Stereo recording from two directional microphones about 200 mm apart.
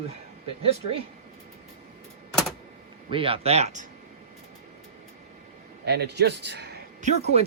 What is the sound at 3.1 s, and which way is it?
Speech, 25° right (ahead or behind).